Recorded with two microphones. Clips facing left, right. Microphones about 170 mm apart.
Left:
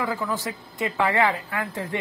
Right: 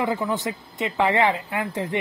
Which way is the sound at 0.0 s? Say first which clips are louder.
Right 3 dB; 20° right (ahead or behind).